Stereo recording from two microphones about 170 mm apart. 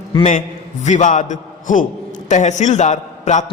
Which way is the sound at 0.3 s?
45° left (ahead or behind).